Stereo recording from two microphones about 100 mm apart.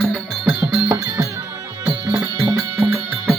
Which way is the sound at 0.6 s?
10° right (ahead or behind).